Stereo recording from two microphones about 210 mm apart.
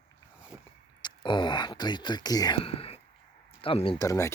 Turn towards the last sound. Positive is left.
turn(degrees=15)  # may be behind; listen again after turning